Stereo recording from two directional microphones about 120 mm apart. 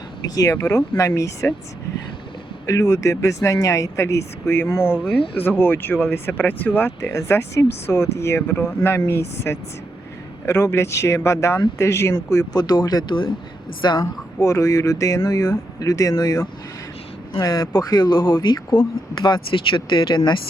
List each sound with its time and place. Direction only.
0.2 s speech: 30° left (ahead or behind)
2.6 s speech: 25° left (ahead or behind)
5.1 s speech: 45° left (ahead or behind)
5.4 s speech: 20° left (ahead or behind)
12.5 s speech: 35° left (ahead or behind)
14.0 s speech: 25° left (ahead or behind); by 20.4 s 40° left (ahead or behind)